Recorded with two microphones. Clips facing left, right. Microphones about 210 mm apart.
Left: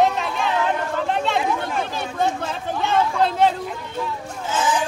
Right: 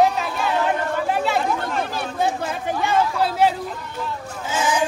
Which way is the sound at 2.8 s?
10° right (ahead or behind).